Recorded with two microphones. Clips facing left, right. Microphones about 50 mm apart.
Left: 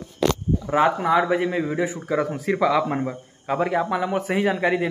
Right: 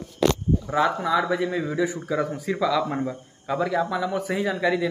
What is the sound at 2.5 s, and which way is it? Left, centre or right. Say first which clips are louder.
A man's voice: left 4 dB; left.